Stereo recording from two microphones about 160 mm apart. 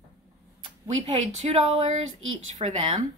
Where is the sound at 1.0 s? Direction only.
40° right (ahead or behind).